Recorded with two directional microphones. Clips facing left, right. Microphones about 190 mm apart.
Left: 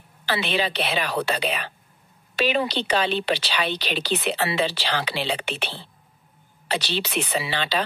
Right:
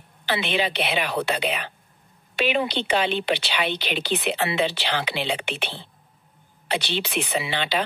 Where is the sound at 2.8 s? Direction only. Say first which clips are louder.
Even; 60° right (ahead or behind).